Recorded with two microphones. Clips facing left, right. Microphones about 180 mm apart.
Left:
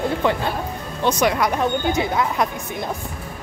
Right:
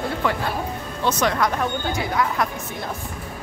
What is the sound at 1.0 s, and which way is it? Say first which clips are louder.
Speech: left 2 dB; 10° left (ahead or behind).